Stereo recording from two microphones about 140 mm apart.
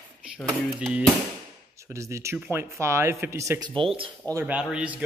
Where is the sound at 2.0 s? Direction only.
20° right (ahead or behind); by 4.1 s 40° right (ahead or behind).